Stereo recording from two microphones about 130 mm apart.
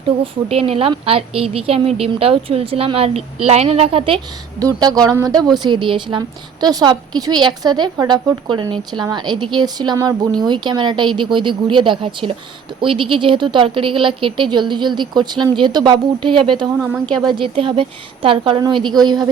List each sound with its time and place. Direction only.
0.4 s a woman's voice: 50° right (ahead or behind)
4.6 s speech: 30° right (ahead or behind)
5.6 s a woman's voice: 40° right (ahead or behind)